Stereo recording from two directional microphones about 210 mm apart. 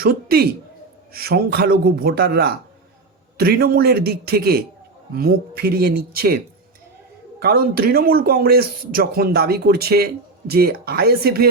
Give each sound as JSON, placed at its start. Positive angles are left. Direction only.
{"t": 0.0, "sound": "speech", "side_deg": -45}